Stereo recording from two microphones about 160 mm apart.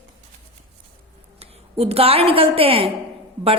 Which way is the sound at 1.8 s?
40° right (ahead or behind).